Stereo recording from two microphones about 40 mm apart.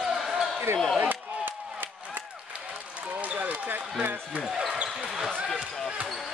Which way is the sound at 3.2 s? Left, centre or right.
Right.